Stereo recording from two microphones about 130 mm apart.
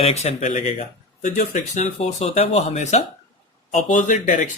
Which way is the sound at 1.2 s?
65° left (ahead or behind).